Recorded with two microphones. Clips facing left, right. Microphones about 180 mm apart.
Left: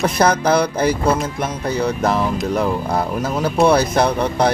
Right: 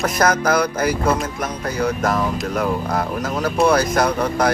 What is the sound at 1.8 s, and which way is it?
Speech, 30° left (ahead or behind).